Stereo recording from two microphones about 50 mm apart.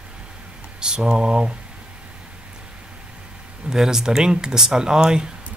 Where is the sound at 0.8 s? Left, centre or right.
Centre.